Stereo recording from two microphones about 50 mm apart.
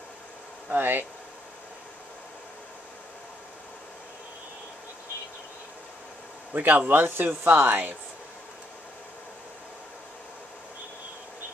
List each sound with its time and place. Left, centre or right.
0.7 s speech: right
6.5 s speech: right
6.9 s speech: right